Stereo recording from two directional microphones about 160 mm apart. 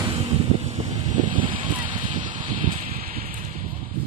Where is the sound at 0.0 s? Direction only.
35° right (ahead or behind).